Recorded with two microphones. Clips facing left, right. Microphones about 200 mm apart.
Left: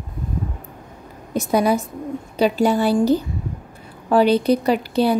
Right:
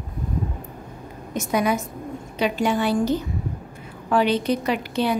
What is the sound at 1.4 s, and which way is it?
A woman's voice, 35° left (ahead or behind).